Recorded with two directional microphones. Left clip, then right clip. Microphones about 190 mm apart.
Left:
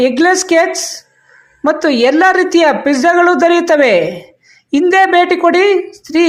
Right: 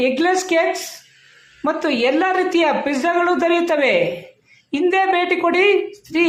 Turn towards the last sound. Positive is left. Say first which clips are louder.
# left 5 dB
turn(degrees=25)  # may be behind; listen again after turning